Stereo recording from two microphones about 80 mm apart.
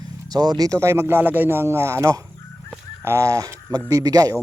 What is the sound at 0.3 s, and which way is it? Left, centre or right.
Speech, right.